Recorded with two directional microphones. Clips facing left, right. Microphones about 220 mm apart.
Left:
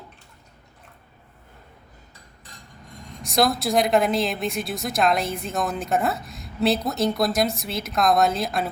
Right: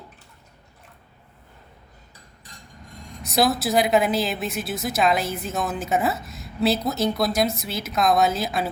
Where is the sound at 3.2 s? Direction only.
Centre (ahead or behind).